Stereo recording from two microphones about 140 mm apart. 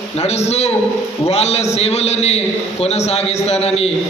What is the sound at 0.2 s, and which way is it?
A man's voice, 50° left (ahead or behind).